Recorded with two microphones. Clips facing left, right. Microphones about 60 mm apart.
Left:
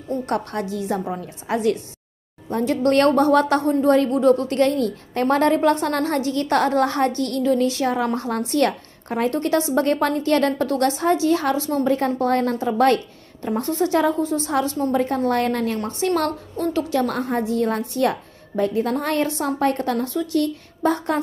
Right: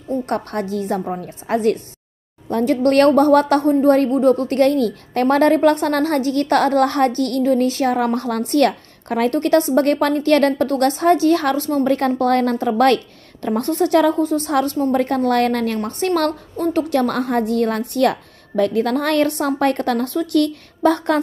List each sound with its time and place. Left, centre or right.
0.3 s a woman's voice: right
16.2 s a woman's voice: right